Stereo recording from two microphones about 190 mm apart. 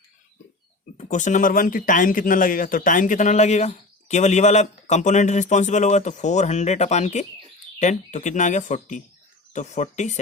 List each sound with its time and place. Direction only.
0.9 s speech: 40° left (ahead or behind)